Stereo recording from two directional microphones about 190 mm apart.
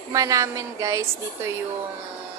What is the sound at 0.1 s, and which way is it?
Speech, 15° right (ahead or behind).